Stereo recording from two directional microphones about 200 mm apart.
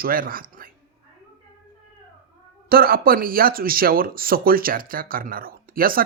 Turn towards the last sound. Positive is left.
turn(degrees=-45)  # may be behind; listen again after turning